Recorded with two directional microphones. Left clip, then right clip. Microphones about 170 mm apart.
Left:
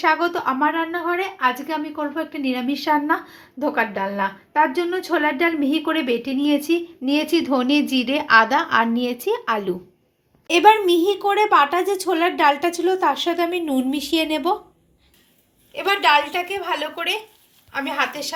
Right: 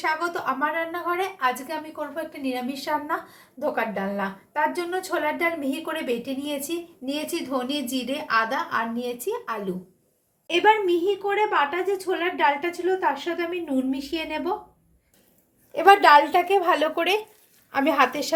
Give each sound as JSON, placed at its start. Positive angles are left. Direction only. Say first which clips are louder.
{"t": 0.0, "sound": "speech", "louder": "left 6 dB", "side_deg": 60}
{"t": 10.4, "sound": "a woman's voice", "louder": "left 5 dB", "side_deg": 30}
{"t": 15.7, "sound": "a woman's voice", "louder": "right 3 dB", "side_deg": -55}